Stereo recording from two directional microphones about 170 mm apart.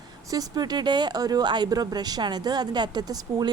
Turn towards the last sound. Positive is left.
turn(degrees=-25)  # may be behind; listen again after turning